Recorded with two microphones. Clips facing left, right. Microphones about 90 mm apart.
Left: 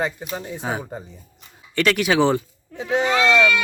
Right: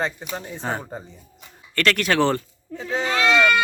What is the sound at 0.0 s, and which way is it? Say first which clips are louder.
Speech: left 1 dB; 5° left (ahead or behind).